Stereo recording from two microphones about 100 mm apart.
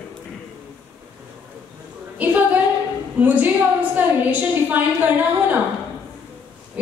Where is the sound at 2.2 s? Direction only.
15° right (ahead or behind).